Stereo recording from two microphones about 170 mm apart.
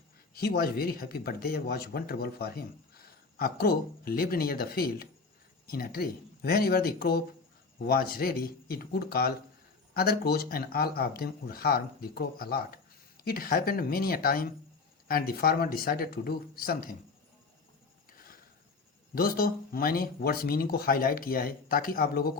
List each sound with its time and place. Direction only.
0.3 s speech: 65° left (ahead or behind)
19.1 s speech: 60° left (ahead or behind)